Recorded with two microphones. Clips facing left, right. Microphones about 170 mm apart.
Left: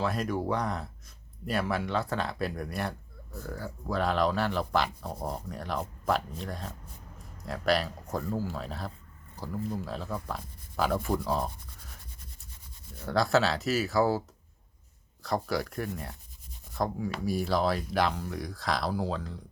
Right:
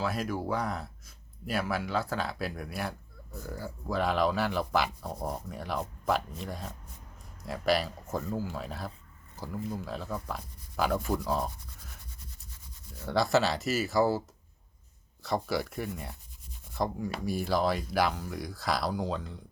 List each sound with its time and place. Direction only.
0.0 s speech: centre (ahead or behind)
13.1 s speech: centre (ahead or behind)
15.2 s speech: centre (ahead or behind)